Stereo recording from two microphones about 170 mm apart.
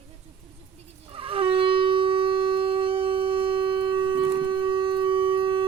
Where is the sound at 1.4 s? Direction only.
30° right (ahead or behind).